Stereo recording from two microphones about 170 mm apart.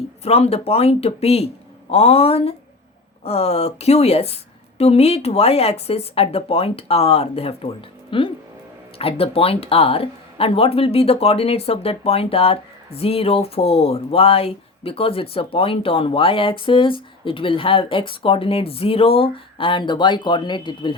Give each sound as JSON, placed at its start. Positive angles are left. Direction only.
{"t": 0.3, "sound": "speech", "side_deg": 35}